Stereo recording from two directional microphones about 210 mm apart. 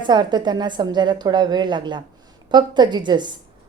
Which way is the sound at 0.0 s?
20° right (ahead or behind).